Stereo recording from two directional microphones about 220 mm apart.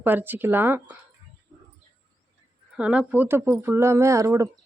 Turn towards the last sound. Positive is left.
turn(degrees=-15)  # may be behind; listen again after turning